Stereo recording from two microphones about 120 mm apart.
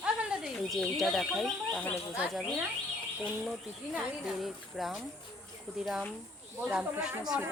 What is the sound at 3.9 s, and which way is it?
Speech, 5° right (ahead or behind).